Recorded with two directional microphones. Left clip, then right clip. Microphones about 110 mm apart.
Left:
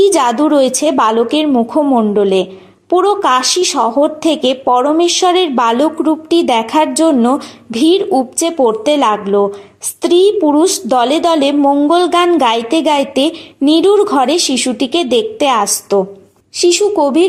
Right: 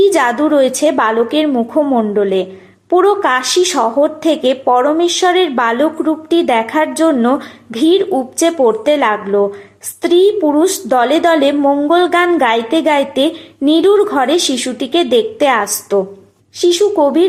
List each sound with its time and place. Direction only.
0.0 s speech: 40° left (ahead or behind)
2.1 s a woman's voice: 45° left (ahead or behind)